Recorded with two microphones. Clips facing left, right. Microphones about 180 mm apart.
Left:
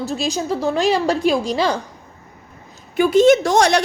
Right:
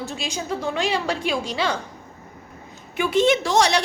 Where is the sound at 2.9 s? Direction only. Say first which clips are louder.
Left 7 dB; 40° left (ahead or behind).